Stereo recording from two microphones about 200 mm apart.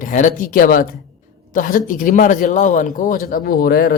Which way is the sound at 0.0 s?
40° left (ahead or behind).